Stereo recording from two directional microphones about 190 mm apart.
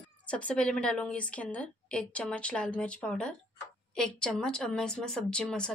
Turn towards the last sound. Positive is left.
turn(degrees=5)  # may be behind; listen again after turning